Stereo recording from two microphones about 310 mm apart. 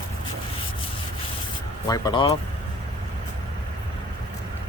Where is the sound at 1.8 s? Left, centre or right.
Centre.